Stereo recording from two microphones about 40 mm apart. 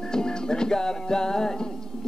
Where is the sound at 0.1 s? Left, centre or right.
Centre.